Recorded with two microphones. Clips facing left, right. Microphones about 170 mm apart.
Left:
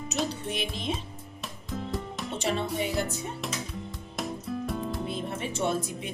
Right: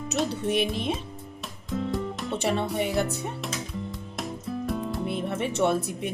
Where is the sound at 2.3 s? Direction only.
60° right (ahead or behind).